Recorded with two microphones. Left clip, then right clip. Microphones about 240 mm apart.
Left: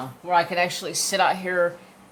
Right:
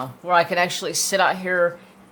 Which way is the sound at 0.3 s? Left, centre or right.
Right.